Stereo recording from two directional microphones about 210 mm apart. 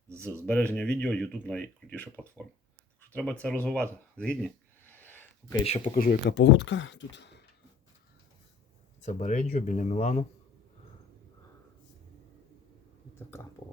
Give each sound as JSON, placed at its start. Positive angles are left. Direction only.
{"t": 0.4, "sound": "speech", "side_deg": 5}
{"t": 4.2, "sound": "a sound", "side_deg": 5}
{"t": 5.6, "sound": "speech", "side_deg": 35}
{"t": 9.0, "sound": "speech", "side_deg": 35}